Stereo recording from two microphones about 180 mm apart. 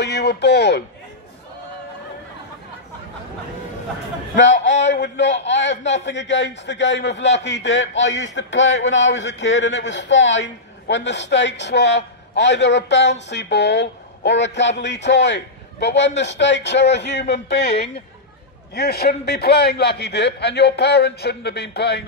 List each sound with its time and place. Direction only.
0.0 s speech: 70° left (ahead or behind)
5.0 s a man's voice: 80° left
18.7 s a man's voice: 60° left (ahead or behind)